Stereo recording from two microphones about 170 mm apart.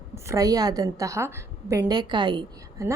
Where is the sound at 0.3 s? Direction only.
20° right (ahead or behind).